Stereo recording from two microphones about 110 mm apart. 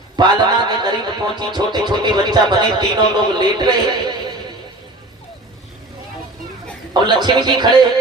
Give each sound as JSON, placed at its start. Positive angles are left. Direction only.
{"t": 0.2, "sound": "a sound", "side_deg": -40}
{"t": 1.4, "sound": "speech", "side_deg": -40}
{"t": 7.0, "sound": "a man's voice", "side_deg": -40}